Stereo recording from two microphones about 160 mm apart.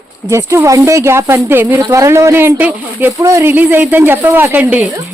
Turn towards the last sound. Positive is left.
turn(degrees=-10)  # may be behind; listen again after turning